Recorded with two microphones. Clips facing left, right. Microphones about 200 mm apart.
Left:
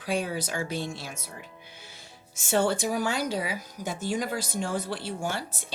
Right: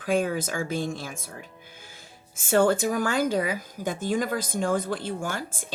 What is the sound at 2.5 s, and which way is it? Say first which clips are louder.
Speech: right 4 dB; 50° right (ahead or behind).